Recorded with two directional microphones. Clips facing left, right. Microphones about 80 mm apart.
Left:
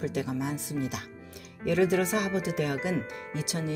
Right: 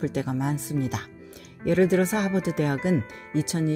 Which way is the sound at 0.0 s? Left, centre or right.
Right.